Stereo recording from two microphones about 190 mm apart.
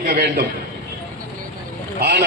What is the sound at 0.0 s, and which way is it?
Speech, 55° right (ahead or behind).